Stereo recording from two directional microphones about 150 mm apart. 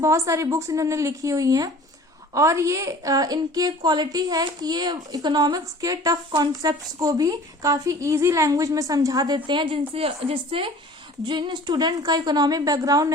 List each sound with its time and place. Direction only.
0.0 s a woman's voice: 20° right (ahead or behind)